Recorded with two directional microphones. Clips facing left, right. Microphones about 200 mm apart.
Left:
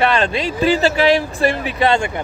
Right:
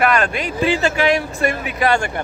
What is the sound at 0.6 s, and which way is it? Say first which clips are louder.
Speech: left 3 dB; 35° left (ahead or behind).